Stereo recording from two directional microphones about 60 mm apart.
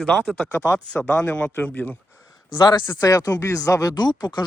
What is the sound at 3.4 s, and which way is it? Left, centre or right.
Speech, left.